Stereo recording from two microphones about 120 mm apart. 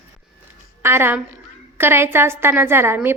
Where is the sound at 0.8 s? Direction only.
20° right (ahead or behind).